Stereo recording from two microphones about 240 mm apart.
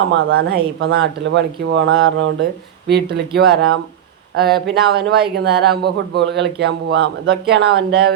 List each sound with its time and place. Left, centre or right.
0.3 s a man's voice: right